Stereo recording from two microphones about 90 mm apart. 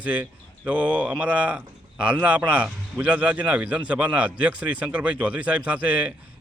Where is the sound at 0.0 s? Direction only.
15° right (ahead or behind).